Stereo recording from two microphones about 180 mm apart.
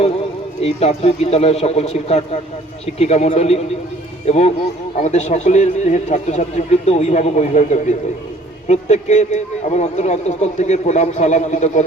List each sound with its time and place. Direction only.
0.6 s a man's voice: 35° left (ahead or behind)